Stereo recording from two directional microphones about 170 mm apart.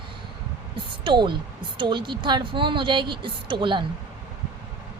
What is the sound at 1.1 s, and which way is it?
A woman's voice, 30° right (ahead or behind).